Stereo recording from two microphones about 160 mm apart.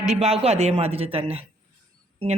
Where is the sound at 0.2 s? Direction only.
40° right (ahead or behind).